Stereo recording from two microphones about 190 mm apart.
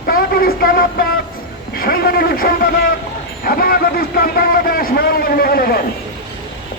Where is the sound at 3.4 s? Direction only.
50° left (ahead or behind).